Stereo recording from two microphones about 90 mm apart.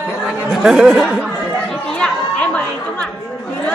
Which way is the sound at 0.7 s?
5° right (ahead or behind).